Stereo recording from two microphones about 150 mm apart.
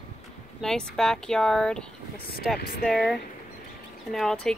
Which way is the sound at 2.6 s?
80° left.